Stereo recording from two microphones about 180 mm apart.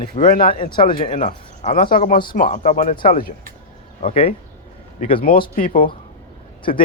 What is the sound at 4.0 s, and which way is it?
Speech, 35° left (ahead or behind).